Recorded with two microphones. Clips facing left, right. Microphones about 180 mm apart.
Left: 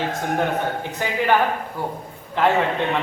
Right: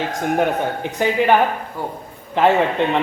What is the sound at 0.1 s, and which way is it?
A man's voice, 15° right (ahead or behind).